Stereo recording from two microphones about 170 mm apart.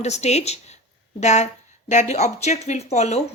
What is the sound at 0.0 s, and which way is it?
Speech, 40° left (ahead or behind).